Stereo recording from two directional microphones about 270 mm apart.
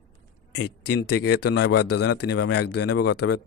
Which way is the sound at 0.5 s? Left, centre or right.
Left.